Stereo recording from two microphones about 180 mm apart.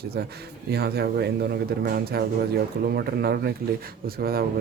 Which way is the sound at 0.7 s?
60° right (ahead or behind).